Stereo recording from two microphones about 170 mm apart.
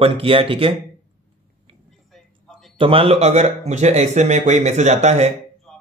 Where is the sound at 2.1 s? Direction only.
Centre (ahead or behind).